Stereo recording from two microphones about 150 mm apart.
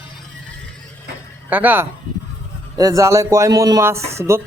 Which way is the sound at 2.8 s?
20° right (ahead or behind).